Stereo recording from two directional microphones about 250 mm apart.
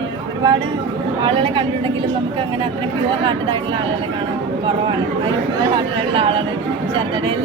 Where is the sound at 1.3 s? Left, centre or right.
Right.